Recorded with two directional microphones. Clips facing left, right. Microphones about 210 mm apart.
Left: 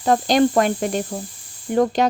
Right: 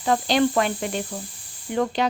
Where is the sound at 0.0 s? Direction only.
45° left (ahead or behind).